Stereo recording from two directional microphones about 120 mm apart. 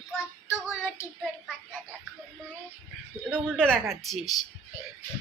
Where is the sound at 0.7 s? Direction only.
20° left (ahead or behind).